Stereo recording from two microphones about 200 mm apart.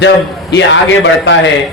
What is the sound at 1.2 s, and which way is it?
Speech, 65° left (ahead or behind).